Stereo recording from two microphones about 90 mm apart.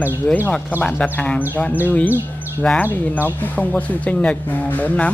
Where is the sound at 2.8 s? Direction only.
20° left (ahead or behind).